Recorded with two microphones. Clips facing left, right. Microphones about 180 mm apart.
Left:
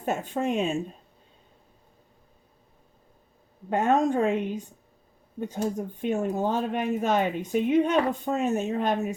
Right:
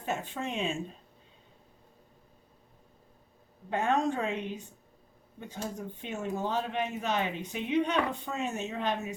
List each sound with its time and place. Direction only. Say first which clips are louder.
0.0 s speech: left 7 dB; 45° left (ahead or behind)
3.7 s speech: left 6 dB; 45° left (ahead or behind)